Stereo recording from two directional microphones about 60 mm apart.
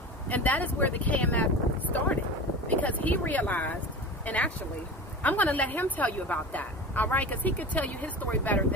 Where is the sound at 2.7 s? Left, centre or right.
Left.